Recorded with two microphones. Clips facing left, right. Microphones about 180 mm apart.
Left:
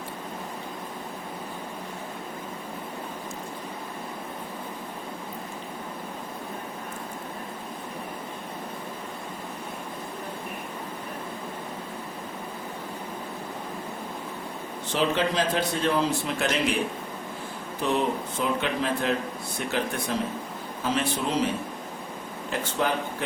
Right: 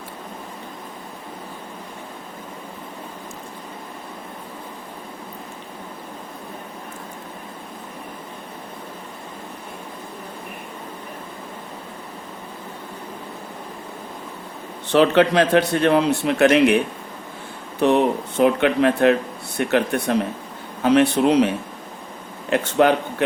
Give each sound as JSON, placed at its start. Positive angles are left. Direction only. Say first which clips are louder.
{"t": 14.9, "sound": "a man's voice", "louder": "right 10 dB", "side_deg": -70}
{"t": 17.7, "sound": "a man's voice", "louder": "right 8 dB", "side_deg": -65}